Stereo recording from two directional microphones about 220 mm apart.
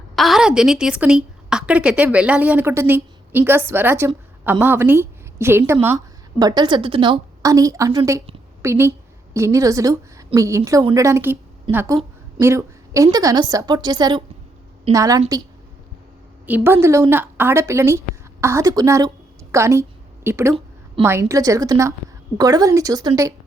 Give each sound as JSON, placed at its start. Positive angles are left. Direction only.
{"t": 0.2, "sound": "a woman's voice", "side_deg": 0}
{"t": 16.5, "sound": "a woman's voice", "side_deg": -10}